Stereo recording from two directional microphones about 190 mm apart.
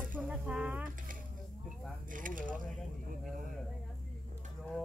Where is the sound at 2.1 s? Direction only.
45° right (ahead or behind).